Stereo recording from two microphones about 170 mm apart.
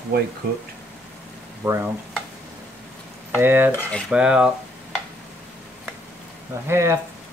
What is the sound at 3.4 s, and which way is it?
Stir, 10° right (ahead or behind).